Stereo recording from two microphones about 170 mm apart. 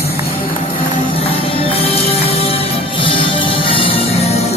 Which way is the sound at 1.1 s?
35° left (ahead or behind).